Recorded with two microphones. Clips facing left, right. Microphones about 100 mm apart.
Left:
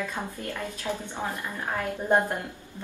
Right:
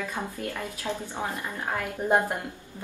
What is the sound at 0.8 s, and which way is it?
Speech, 15° right (ahead or behind).